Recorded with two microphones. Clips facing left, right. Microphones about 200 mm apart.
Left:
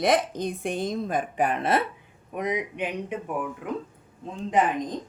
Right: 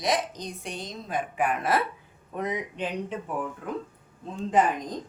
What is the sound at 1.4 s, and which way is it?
Speech, 30° left (ahead or behind).